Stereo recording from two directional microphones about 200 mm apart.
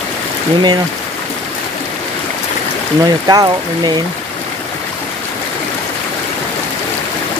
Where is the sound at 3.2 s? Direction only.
20° right (ahead or behind).